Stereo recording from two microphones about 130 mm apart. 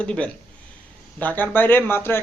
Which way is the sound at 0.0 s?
10° left (ahead or behind).